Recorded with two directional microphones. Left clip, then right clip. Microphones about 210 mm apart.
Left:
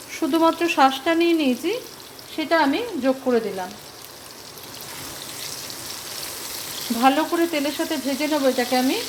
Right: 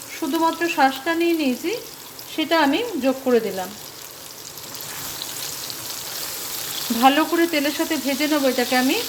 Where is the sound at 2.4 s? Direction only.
5° right (ahead or behind).